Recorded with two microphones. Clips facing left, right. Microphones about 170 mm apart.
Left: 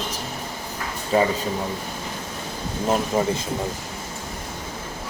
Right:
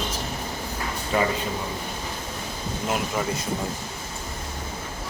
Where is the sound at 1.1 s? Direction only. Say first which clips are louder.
Left 4 dB; 30° left (ahead or behind).